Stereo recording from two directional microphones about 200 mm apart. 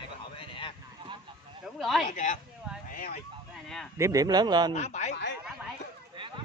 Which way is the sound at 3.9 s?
15° right (ahead or behind).